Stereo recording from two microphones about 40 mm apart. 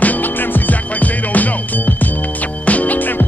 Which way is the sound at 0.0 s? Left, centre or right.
Left.